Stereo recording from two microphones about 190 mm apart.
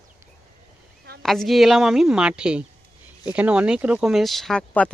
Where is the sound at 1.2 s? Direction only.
Centre (ahead or behind).